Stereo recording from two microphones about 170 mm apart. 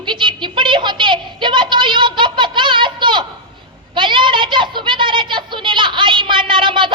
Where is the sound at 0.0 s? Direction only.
30° right (ahead or behind).